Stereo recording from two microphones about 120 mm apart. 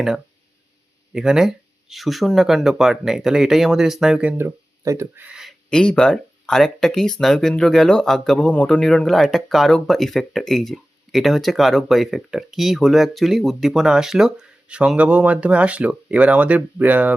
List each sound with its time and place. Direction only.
1.1 s speech: 5° right (ahead or behind)
4.4 s speech: 25° right (ahead or behind)
5.2 s a sound: 5° right (ahead or behind)
5.7 s speech: 10° left (ahead or behind); by 17.2 s 15° right (ahead or behind)